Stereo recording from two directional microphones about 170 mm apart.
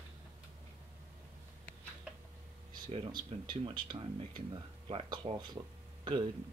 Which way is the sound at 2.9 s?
25° right (ahead or behind).